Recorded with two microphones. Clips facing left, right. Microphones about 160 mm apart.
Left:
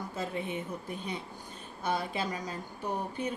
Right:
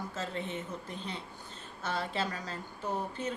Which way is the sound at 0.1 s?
10° left (ahead or behind).